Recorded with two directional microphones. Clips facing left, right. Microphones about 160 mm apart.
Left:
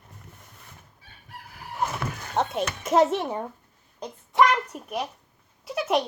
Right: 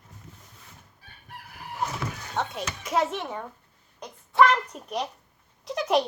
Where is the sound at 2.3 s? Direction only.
55° left (ahead or behind).